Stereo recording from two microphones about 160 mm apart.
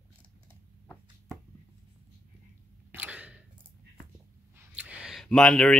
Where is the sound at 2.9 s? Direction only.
10° right (ahead or behind).